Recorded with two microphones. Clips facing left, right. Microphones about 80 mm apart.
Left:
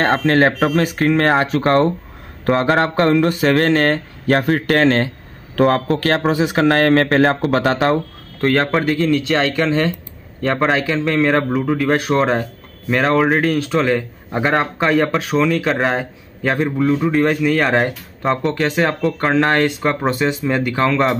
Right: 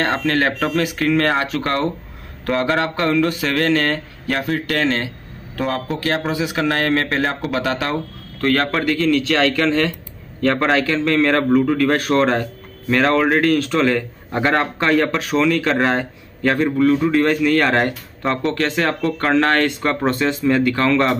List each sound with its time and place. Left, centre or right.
0.0 s a man's voice: left
9.1 s speech: centre
9.6 s a man's voice: centre
16.6 s speech: centre
17.0 s a man's voice: centre